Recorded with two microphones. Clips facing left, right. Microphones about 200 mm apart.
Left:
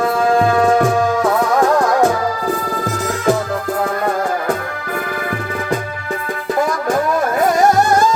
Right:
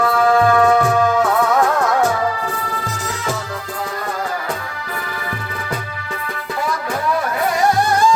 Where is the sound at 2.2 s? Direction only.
40° left (ahead or behind).